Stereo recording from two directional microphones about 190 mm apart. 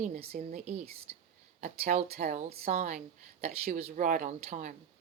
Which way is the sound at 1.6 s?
40° right (ahead or behind).